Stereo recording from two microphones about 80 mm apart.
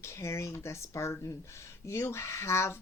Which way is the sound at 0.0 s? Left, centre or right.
Left.